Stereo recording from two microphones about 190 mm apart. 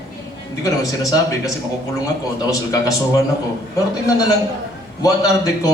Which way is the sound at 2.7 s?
15° left (ahead or behind).